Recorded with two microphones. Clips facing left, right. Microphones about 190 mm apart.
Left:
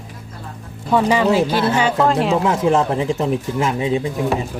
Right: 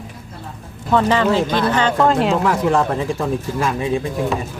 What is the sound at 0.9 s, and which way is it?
A woman's voice, 10° left (ahead or behind).